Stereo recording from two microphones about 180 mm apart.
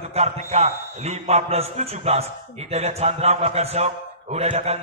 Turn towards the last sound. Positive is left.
turn(degrees=-35)  # may be behind; listen again after turning